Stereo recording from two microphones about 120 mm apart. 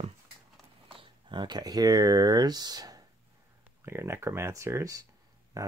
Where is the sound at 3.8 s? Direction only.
20° right (ahead or behind).